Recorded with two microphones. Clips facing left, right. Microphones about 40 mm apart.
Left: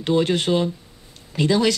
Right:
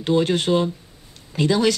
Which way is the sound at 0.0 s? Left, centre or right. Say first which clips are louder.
Even; left.